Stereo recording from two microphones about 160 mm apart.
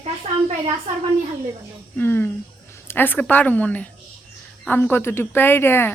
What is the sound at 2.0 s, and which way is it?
Speech, 15° left (ahead or behind).